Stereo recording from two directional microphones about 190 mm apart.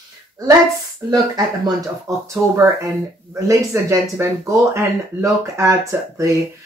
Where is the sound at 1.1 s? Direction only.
20° right (ahead or behind).